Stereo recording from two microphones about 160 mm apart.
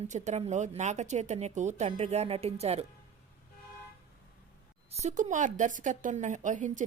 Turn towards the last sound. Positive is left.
turn(degrees=-50)  # may be behind; listen again after turning